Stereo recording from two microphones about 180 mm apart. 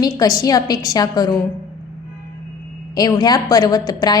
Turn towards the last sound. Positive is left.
turn(degrees=20)  # may be behind; listen again after turning